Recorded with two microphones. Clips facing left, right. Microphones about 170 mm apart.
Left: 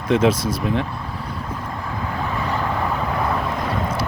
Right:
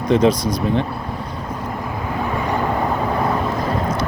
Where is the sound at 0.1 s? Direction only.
5° left (ahead or behind).